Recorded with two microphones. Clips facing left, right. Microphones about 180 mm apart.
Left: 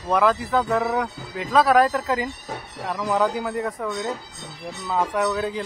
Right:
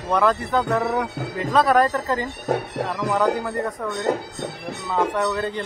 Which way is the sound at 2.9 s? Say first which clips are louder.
Left 2 dB; 10° left (ahead or behind).